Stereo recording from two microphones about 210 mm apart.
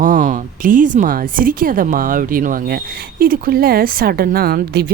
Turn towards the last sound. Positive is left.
turn(degrees=-45)  # may be behind; listen again after turning